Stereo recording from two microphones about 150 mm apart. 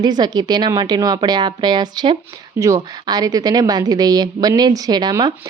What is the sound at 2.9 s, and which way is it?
A woman's voice, 25° right (ahead or behind).